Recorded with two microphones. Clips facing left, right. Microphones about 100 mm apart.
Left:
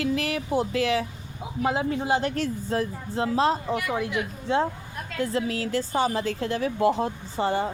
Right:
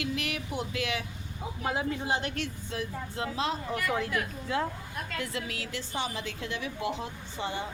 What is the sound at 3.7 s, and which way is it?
Speech, 15° left (ahead or behind).